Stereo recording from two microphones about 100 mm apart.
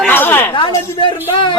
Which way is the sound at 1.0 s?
55° left (ahead or behind).